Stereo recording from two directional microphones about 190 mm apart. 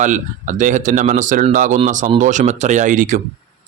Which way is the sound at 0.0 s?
40° right (ahead or behind).